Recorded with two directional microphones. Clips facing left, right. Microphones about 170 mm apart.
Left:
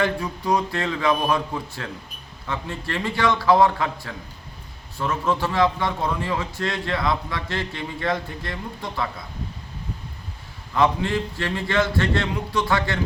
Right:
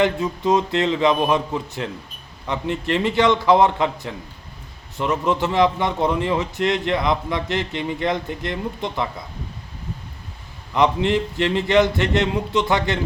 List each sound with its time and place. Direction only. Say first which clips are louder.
0.0 s a man's voice: right 5 dB; 20° right (ahead or behind)
10.8 s a man's voice: right 3 dB; 20° right (ahead or behind)